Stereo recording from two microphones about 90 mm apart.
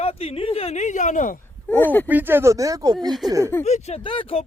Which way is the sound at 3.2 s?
35° right (ahead or behind).